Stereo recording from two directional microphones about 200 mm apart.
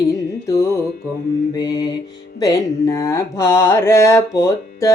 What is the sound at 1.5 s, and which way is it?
Mantra, 20° left (ahead or behind).